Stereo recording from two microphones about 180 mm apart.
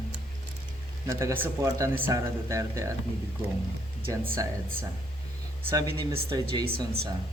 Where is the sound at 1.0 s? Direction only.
15° right (ahead or behind).